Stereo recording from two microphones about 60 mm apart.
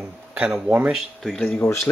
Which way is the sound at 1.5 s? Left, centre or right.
Left.